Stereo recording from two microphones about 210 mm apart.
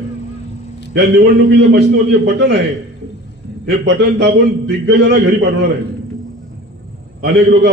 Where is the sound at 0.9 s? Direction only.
55° right (ahead or behind).